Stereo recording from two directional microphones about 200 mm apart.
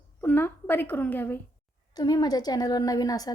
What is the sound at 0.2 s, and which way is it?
A woman's voice, 10° left (ahead or behind).